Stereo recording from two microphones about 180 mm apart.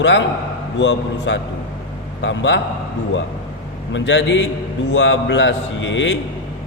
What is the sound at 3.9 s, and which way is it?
A man's voice, 90° left.